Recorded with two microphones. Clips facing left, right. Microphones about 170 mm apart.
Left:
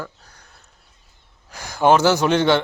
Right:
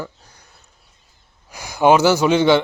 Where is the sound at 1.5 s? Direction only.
10° right (ahead or behind).